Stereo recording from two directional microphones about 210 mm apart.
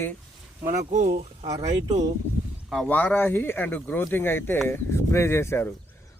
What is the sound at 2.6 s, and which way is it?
Speech, 5° left (ahead or behind).